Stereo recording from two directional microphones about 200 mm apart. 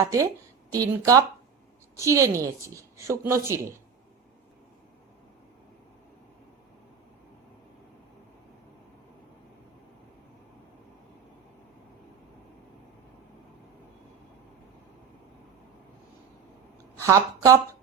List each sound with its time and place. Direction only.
0.0 s a woman's voice: 15° right (ahead or behind)
17.0 s a woman's voice: 15° right (ahead or behind)